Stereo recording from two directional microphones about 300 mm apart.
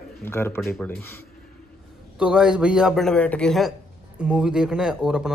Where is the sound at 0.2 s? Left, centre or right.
Centre.